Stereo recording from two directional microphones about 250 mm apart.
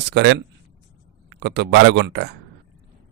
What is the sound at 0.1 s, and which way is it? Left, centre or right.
A man's voice, right.